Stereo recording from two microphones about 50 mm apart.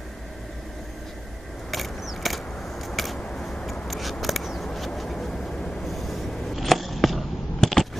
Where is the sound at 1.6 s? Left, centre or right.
Centre.